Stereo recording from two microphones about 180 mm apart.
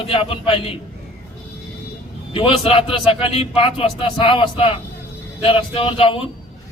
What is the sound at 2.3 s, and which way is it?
A man's voice, 30° left (ahead or behind).